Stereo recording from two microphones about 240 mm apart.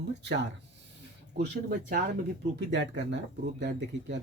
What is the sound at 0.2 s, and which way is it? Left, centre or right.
Speech, right.